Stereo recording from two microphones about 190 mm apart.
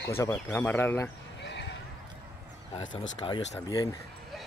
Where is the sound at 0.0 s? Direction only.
15° left (ahead or behind).